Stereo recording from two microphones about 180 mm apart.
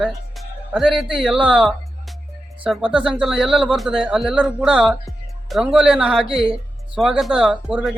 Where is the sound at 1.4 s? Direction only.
30° right (ahead or behind).